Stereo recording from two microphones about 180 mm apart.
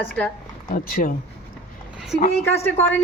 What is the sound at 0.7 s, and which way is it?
Speech, 50° left (ahead or behind).